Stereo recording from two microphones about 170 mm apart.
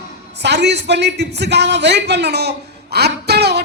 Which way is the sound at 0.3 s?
80° right.